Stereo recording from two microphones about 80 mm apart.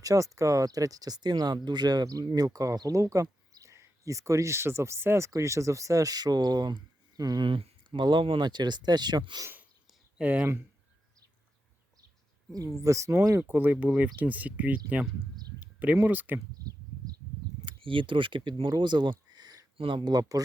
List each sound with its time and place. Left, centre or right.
0.0 s speech: right
7.4 s speech: right
10.2 s speech: centre
12.5 s speech: right
13.4 s speech: right
17.7 s speech: right
19.9 s speech: right
20.1 s speech: right